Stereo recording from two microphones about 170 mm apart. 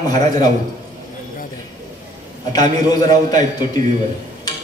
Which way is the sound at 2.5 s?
25° left (ahead or behind).